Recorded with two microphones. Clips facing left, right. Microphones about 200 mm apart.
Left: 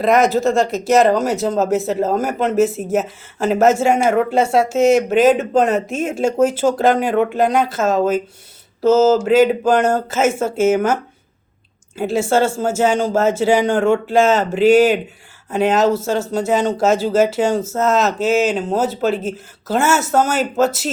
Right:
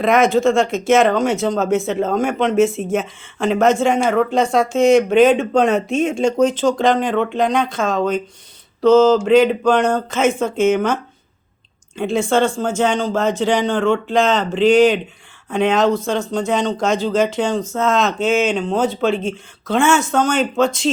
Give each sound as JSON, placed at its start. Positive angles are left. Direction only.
{"t": 0.0, "sound": "speech", "side_deg": 0}
{"t": 5.2, "sound": "speech", "side_deg": 40}
{"t": 5.5, "sound": "speech", "side_deg": 5}
{"t": 11.9, "sound": "speech", "side_deg": 5}